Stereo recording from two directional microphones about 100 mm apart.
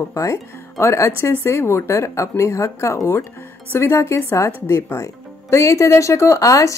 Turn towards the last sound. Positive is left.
turn(degrees=35)  # may be behind; listen again after turning